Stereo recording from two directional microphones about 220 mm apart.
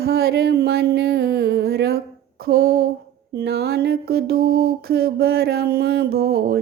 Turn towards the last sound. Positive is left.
turn(degrees=-45)  # may be behind; listen again after turning